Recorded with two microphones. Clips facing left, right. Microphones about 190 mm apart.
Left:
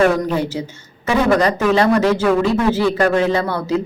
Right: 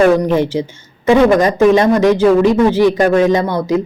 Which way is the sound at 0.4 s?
40° left (ahead or behind).